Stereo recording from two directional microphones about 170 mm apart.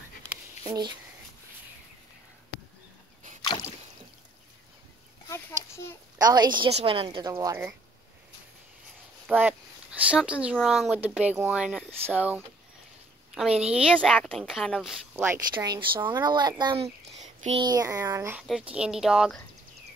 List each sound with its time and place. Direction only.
0.7 s speech: 25° right (ahead or behind)
5.3 s a sound: 15° left (ahead or behind)
6.1 s speech: 25° right (ahead or behind)
9.3 s a woman's voice: 10° right (ahead or behind)
15.2 s speech: 20° right (ahead or behind); by 17.6 s 40° right (ahead or behind)
17.6 s speech: 25° right (ahead or behind); by 19.4 s centre (ahead or behind)